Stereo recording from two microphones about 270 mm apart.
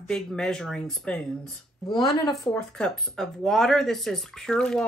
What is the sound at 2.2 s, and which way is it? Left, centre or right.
Speech, centre.